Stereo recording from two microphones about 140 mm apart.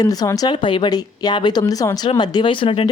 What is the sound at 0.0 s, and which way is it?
Speech, 25° left (ahead or behind).